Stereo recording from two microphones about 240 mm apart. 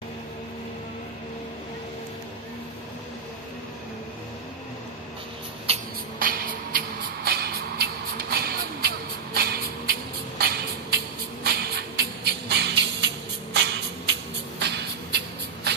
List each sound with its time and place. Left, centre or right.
6.1 s music: right
14.6 s shuffle: right